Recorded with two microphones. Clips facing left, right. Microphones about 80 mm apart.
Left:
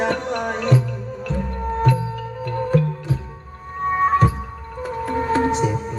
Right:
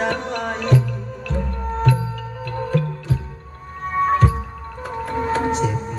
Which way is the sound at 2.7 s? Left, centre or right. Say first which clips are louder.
Left 2 dB; left.